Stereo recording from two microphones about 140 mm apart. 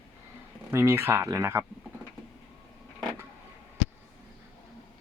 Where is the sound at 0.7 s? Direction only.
15° right (ahead or behind).